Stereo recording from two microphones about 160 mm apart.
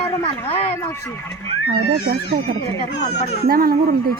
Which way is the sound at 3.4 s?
70° right (ahead or behind).